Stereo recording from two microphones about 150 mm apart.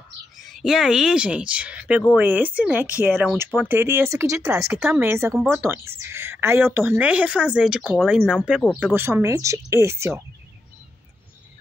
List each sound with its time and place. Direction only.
0.4 s speech: centre (ahead or behind); by 10.2 s 20° right (ahead or behind)